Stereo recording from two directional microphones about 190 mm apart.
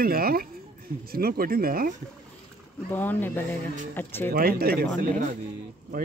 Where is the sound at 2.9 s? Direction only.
10° left (ahead or behind).